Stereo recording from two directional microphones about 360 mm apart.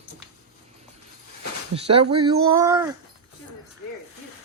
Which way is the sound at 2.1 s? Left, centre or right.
Centre.